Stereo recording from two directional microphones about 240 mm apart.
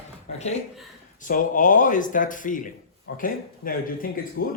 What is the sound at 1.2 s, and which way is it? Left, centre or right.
Speech, left.